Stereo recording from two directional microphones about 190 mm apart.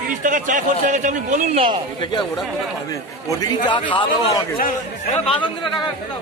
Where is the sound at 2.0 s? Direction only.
25° left (ahead or behind).